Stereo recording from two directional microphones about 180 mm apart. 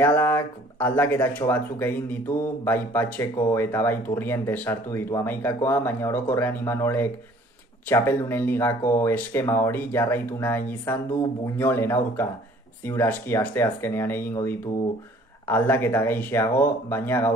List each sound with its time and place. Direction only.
0.0 s speech: 10° left (ahead or behind)